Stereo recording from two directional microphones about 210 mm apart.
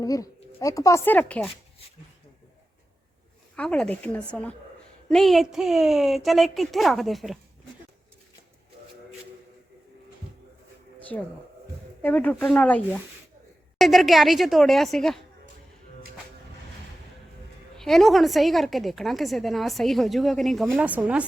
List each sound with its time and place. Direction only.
0.0 s speech: 15° left (ahead or behind)
3.5 s a woman's voice: 5° left (ahead or behind)
12.0 s a woman's voice: 5° left (ahead or behind)
17.7 s a woman's voice: centre (ahead or behind)